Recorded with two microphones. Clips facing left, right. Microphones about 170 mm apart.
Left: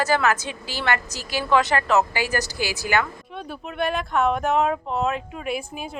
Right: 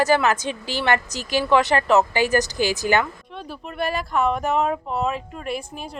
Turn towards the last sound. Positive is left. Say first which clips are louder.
# left 1 dB
turn(degrees=5)  # may be behind; listen again after turning